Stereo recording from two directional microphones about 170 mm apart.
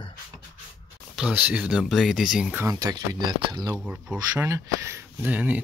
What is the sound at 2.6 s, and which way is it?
Speech, 20° right (ahead or behind).